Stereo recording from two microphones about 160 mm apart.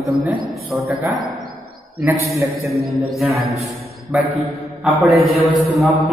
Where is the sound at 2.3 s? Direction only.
20° right (ahead or behind).